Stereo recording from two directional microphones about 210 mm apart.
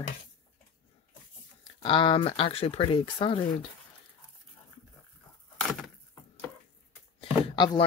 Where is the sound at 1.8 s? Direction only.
25° left (ahead or behind).